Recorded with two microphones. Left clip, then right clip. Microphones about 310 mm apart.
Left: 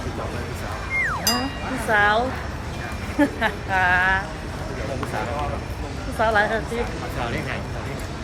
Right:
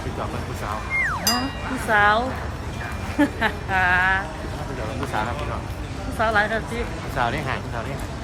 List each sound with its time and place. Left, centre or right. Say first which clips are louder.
1.0 s music: left 1 dB; centre
1.9 s speech: right 1 dB; centre
6.1 s speech: left 1 dB; centre
7.2 s speech: right 6 dB; centre